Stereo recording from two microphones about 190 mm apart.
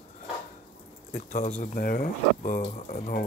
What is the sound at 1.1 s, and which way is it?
Speech, 45° left (ahead or behind).